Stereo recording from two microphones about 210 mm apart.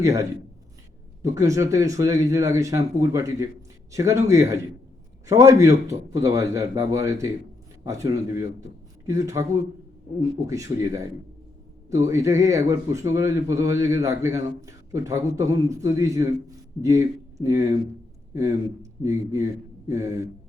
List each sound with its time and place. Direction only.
0.0 s a man's voice: 15° right (ahead or behind)
19.0 s a man's voice: 15° right (ahead or behind)